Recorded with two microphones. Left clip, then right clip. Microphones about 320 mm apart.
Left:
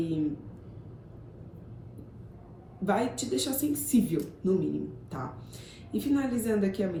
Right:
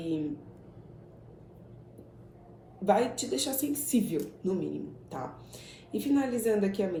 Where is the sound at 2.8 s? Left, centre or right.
Centre.